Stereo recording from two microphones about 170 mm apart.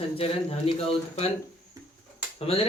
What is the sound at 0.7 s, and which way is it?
Speech, 35° left (ahead or behind).